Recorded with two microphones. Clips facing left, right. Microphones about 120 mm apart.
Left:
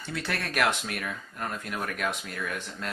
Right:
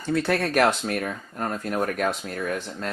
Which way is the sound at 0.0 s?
40° right (ahead or behind).